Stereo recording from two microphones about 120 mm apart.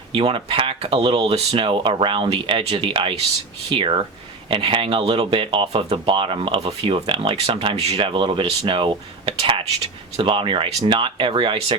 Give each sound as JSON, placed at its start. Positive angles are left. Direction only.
{"t": 0.1, "sound": "speech", "side_deg": -45}